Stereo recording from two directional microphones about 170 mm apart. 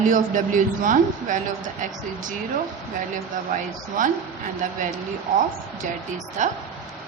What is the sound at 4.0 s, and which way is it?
Speech, 50° right (ahead or behind).